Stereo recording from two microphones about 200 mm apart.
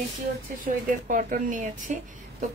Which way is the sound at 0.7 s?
45° right (ahead or behind).